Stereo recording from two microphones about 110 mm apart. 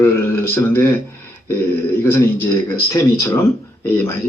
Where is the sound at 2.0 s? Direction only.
15° left (ahead or behind).